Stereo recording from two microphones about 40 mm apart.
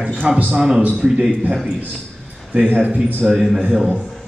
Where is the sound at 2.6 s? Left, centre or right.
Right.